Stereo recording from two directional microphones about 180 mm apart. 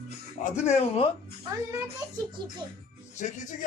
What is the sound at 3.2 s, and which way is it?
Speech, 45° left (ahead or behind).